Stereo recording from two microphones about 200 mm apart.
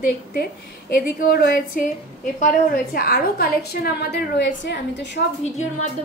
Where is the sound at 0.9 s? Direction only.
50° left (ahead or behind); by 5.2 s 65° left (ahead or behind).